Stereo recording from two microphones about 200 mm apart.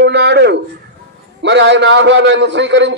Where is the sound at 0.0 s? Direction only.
55° right (ahead or behind).